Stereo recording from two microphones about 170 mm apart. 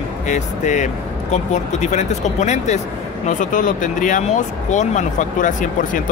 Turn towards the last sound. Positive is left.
turn(degrees=50)  # may be behind; listen again after turning